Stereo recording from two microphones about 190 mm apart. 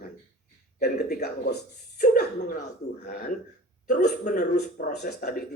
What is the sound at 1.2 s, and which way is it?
A man's voice, 60° left (ahead or behind).